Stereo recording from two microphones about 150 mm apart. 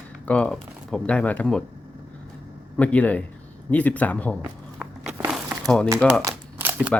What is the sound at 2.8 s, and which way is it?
Speech, 10° left (ahead or behind).